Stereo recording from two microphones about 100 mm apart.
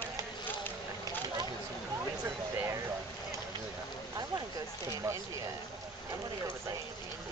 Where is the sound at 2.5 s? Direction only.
30° right (ahead or behind).